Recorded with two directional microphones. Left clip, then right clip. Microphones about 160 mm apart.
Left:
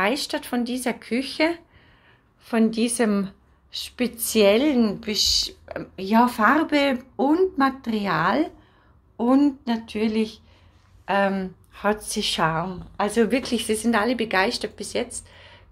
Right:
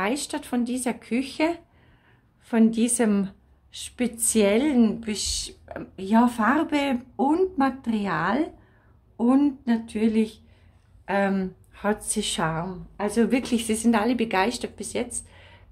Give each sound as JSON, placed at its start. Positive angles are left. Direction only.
{"t": 0.0, "sound": "a woman's voice", "side_deg": -10}
{"t": 13.3, "sound": "speech", "side_deg": -20}